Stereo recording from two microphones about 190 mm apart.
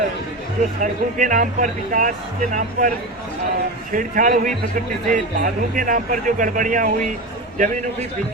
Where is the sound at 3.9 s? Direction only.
45° right (ahead or behind).